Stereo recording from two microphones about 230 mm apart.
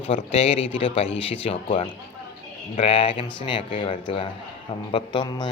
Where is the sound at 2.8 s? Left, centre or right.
Left.